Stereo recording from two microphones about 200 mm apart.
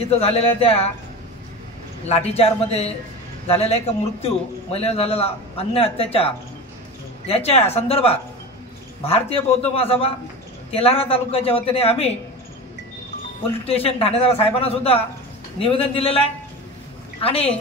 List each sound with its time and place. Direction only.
0.1 s a man's voice: 30° left (ahead or behind)
2.0 s a man's voice: 30° left (ahead or behind)
13.7 s a man's voice: 30° left (ahead or behind)